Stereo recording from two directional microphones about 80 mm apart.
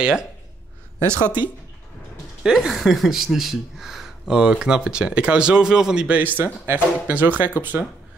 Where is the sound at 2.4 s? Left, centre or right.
Centre.